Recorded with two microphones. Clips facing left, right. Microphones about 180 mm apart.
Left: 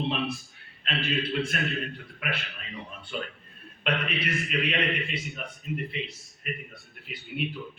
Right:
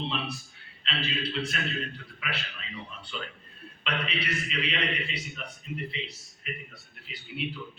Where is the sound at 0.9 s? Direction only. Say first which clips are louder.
Left 4 dB; 50° left (ahead or behind).